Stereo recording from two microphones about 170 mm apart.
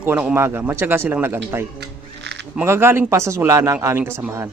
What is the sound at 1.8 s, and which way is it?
Music, 90° right.